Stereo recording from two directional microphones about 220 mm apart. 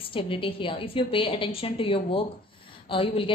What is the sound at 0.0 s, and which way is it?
A woman's voice, 25° left (ahead or behind).